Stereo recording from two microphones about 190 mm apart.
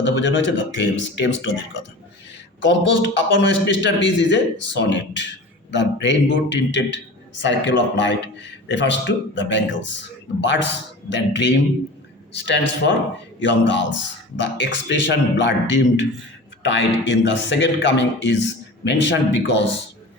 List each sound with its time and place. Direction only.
0.0 s a man's voice: 75° left (ahead or behind)
17.1 s a man's voice: 70° left (ahead or behind)